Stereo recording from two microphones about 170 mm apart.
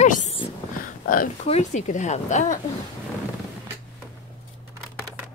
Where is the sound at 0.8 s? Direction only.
55° left (ahead or behind).